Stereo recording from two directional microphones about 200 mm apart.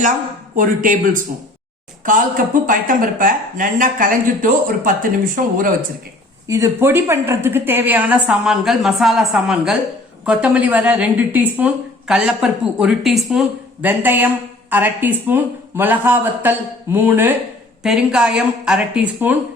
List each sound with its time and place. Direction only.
0.5 s a woman's voice: 40° right (ahead or behind)
6.5 s a woman's voice: 15° right (ahead or behind)